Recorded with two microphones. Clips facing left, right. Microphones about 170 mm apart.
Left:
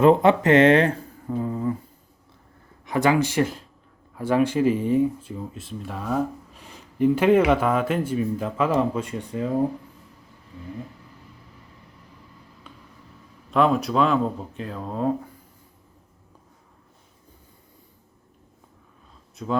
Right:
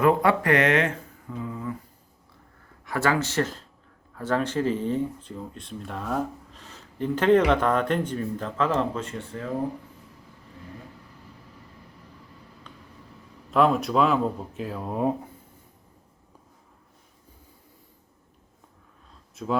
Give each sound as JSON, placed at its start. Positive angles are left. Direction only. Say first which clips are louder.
{"t": 0.0, "sound": "speech", "louder": "left 5 dB", "side_deg": 25}
{"t": 2.8, "sound": "speech", "louder": "left 4 dB", "side_deg": 15}
{"t": 6.6, "sound": "speech", "louder": "left 9 dB", "side_deg": 15}
{"t": 12.7, "sound": "a sound", "louder": "left 3 dB", "side_deg": 5}
{"t": 13.5, "sound": "speech", "louder": "left 1 dB", "side_deg": 0}
{"t": 19.4, "sound": "speech", "louder": "even", "side_deg": 0}